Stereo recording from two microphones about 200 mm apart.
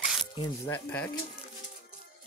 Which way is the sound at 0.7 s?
5° left (ahead or behind).